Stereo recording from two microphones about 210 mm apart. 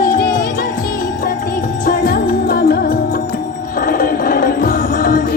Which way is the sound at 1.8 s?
45° left (ahead or behind).